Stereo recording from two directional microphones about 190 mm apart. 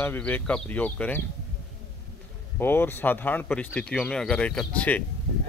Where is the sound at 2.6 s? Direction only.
10° left (ahead or behind).